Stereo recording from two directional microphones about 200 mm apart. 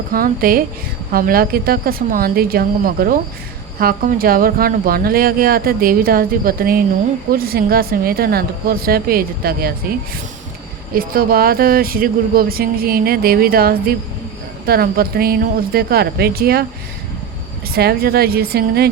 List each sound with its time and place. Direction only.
0.1 s speech: 45° right (ahead or behind)
10.9 s speech: 45° right (ahead or behind)
17.7 s speech: 50° right (ahead or behind)